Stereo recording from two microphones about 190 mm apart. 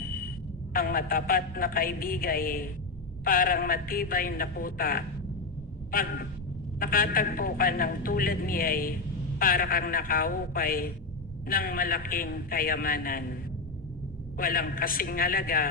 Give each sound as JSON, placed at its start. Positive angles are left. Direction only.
{"t": 0.0, "sound": "a sound", "side_deg": 50}
{"t": 0.7, "sound": "a man's voice", "side_deg": 50}
{"t": 14.3, "sound": "a man's voice", "side_deg": 50}